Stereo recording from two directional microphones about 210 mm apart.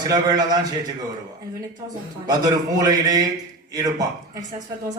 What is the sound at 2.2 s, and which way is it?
A man's voice, 20° right (ahead or behind).